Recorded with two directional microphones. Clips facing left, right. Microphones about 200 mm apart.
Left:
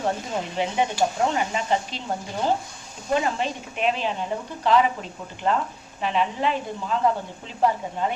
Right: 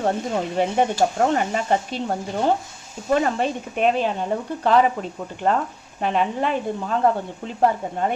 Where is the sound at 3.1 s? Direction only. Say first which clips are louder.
Right 3 dB; 50° right (ahead or behind).